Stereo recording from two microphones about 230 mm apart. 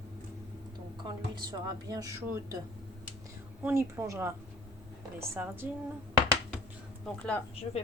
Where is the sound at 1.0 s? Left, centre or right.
Centre.